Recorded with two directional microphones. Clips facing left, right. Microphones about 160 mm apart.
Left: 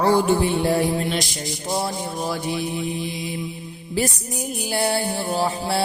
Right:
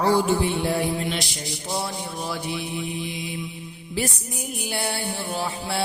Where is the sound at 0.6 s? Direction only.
40° left (ahead or behind).